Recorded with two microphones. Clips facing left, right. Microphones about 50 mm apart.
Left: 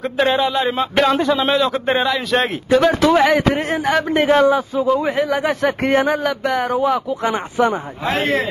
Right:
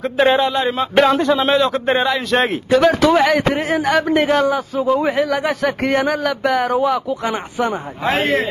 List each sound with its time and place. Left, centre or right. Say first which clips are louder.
0.0 s speech: right 2 dB; centre
4.8 s speech: right 3 dB; centre
5.2 s speech: even; centre
6.2 s speech: right 2 dB; centre
7.3 s speech: left 3 dB; left